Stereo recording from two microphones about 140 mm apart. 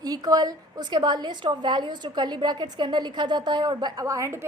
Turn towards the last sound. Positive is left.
turn(degrees=-20)  # may be behind; listen again after turning